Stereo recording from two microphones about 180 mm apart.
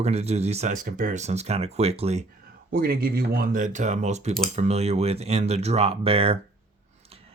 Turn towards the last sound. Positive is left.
turn(degrees=-30)  # may be behind; listen again after turning